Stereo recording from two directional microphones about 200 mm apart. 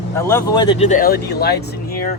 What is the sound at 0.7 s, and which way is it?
Speech, 35° left (ahead or behind).